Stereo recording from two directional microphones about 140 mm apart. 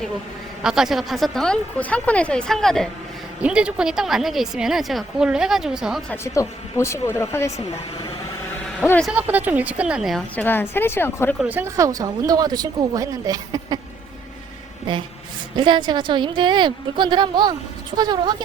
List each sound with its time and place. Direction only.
0.6 s a woman's voice: 5° right (ahead or behind)
3.4 s a woman's voice: 5° right (ahead or behind)
6.2 s speech: 20° left (ahead or behind)
8.8 s a woman's voice: 10° left (ahead or behind)
9.0 s a woman's voice: 10° right (ahead or behind)
10.3 s a woman's voice: 15° left (ahead or behind)
11.3 s speech: 10° right (ahead or behind)
15.5 s a woman's voice: 35° right (ahead or behind)